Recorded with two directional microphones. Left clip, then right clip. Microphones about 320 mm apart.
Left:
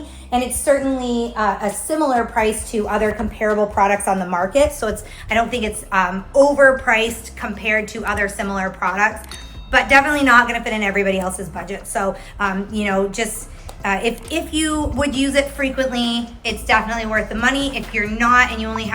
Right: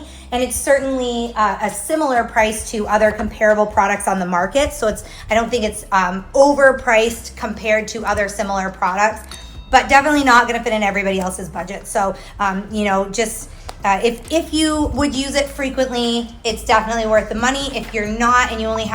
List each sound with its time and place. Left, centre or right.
0.3 s a woman's voice: right; by 18.9 s centre